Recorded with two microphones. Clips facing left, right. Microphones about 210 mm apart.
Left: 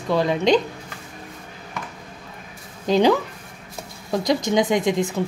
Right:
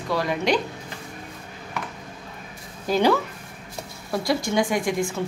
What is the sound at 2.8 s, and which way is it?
Speech, 20° left (ahead or behind).